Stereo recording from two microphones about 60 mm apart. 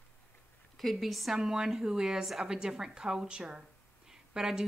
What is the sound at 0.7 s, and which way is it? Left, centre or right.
A woman's voice, centre.